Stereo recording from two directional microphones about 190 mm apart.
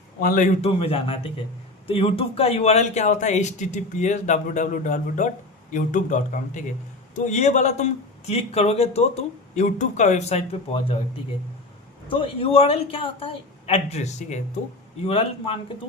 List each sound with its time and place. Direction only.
0.2 s speech: 45° left (ahead or behind)
12.0 s a man's voice: 30° left (ahead or behind)